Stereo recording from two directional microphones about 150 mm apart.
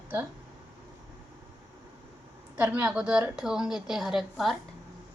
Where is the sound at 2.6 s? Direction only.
10° right (ahead or behind).